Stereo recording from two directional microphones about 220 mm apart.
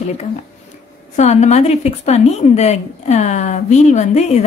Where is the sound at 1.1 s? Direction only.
30° left (ahead or behind).